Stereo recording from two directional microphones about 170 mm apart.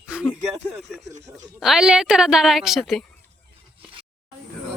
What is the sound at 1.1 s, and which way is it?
Speech, 45° right (ahead or behind).